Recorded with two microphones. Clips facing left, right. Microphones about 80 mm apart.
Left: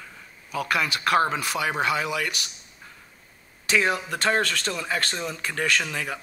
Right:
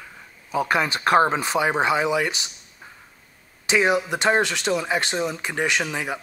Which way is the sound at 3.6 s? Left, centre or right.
Centre.